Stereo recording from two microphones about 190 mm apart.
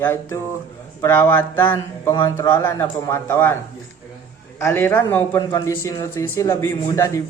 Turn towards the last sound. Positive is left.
turn(degrees=15)  # may be behind; listen again after turning